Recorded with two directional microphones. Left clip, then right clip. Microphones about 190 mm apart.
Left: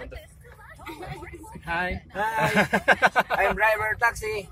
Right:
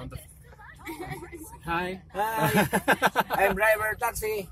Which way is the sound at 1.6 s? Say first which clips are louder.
Left 2 dB; 10° right (ahead or behind).